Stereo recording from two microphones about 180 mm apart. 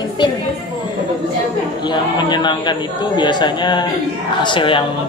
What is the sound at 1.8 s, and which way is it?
A man's voice, 25° left (ahead or behind).